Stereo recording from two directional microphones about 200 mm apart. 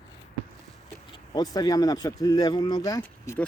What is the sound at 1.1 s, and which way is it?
Speech, 20° left (ahead or behind).